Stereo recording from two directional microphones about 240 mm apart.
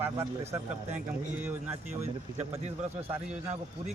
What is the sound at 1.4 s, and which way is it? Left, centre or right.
Speech, centre.